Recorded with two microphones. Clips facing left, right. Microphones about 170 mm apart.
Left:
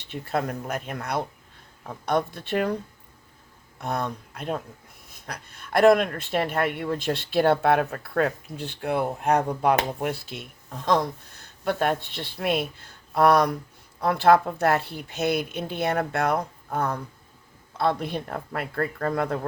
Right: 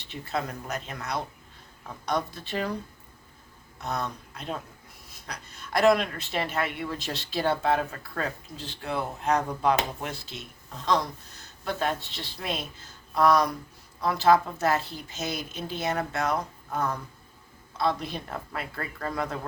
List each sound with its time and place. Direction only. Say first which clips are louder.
0.1 s speech: left 4 dB; 55° left (ahead or behind)
3.8 s speech: left 3 dB; 55° left (ahead or behind)
11.6 s speech: left 5 dB; 55° left (ahead or behind)
17.7 s speech: left 3 dB; 55° left (ahead or behind)